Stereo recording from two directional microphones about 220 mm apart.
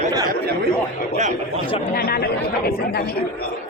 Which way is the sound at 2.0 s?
45° left (ahead or behind).